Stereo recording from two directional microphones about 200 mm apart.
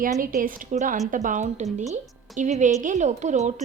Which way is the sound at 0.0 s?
45° right (ahead or behind).